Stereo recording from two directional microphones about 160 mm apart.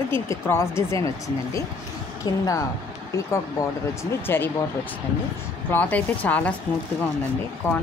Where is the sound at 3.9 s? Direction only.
20° left (ahead or behind).